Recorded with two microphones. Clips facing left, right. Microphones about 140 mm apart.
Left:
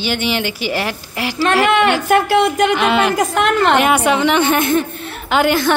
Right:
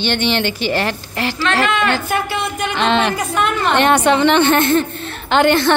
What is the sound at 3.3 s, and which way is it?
Speech, 90° left.